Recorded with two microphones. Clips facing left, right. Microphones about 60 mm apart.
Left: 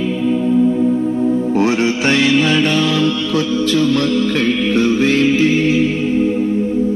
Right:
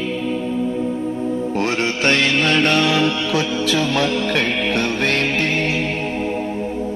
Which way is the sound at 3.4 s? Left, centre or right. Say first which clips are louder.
Left 5 dB; right.